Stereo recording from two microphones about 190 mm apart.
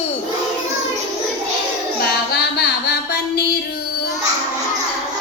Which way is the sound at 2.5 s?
60° left (ahead or behind).